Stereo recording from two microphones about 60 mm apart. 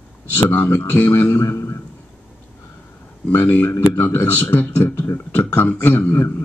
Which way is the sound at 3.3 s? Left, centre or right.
Left.